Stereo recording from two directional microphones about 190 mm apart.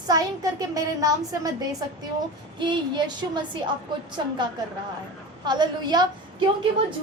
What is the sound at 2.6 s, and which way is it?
Speech, 25° right (ahead or behind).